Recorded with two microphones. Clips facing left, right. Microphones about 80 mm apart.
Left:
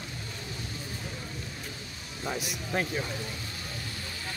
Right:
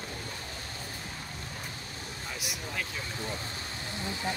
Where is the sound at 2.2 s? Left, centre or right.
Left.